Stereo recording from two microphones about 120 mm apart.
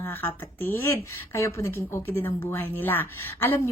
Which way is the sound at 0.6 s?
20° left (ahead or behind).